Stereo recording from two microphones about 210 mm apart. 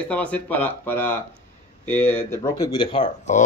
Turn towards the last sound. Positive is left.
turn(degrees=35)  # may be behind; listen again after turning